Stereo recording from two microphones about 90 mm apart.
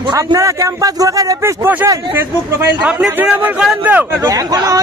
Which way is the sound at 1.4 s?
25° right (ahead or behind).